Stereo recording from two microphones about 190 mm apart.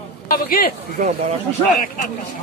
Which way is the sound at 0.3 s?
50° left (ahead or behind).